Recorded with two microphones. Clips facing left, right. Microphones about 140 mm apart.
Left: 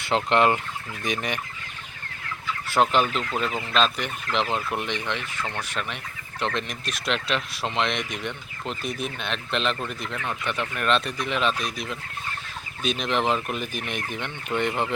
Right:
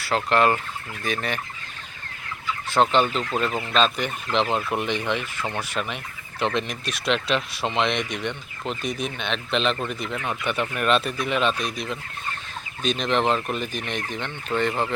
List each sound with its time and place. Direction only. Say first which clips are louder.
0.0 s fowl: even; 20° left (ahead or behind)
1.0 s speech: right 1 dB; 15° left (ahead or behind)
2.7 s speech: right 2 dB; 5° left (ahead or behind)